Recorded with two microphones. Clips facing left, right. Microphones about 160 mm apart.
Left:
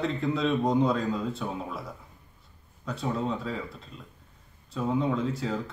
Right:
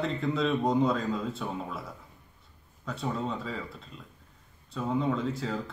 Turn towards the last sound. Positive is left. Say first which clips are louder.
# left 1 dB
turn(degrees=0)  # may be behind; listen again after turning